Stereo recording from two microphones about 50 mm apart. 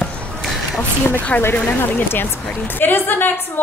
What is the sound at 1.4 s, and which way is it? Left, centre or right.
A woman's voice, left.